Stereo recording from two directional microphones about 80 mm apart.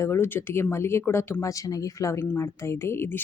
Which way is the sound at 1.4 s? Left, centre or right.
Left.